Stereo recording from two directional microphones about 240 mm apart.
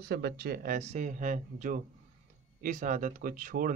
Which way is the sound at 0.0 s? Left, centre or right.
Right.